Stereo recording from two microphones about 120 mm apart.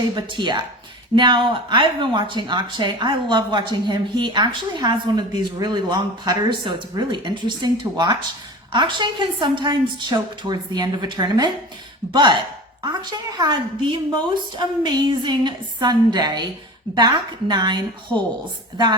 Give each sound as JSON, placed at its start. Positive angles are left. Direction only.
{"t": 0.2, "sound": "speech", "side_deg": -40}
{"t": 12.8, "sound": "speech", "side_deg": -40}